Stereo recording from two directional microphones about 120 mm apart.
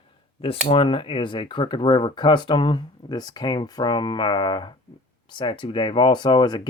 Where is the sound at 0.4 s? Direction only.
50° left (ahead or behind).